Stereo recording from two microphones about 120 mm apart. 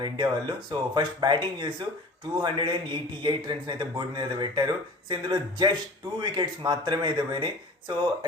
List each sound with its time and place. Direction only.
0.0 s a man's voice: 40° right (ahead or behind)